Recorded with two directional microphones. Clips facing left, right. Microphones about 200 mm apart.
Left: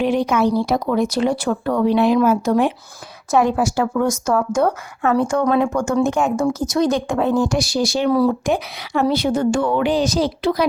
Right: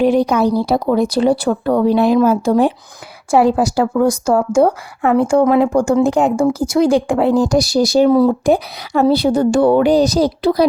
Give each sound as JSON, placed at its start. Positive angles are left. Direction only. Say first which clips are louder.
{"t": 0.0, "sound": "a woman's voice", "louder": "right 4 dB", "side_deg": -40}
{"t": 8.1, "sound": "a woman's voice", "louder": "right 4 dB", "side_deg": -20}
{"t": 8.4, "sound": "a woman's voice", "louder": "right 6 dB", "side_deg": -35}